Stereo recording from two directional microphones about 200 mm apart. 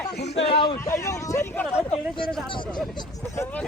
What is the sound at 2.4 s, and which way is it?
Speech, 25° left (ahead or behind).